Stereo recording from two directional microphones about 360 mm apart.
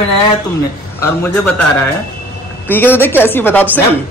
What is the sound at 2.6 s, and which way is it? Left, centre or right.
A man's voice, centre.